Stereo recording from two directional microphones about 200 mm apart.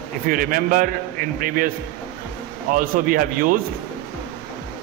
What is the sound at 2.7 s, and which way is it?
Speech, 45° right (ahead or behind).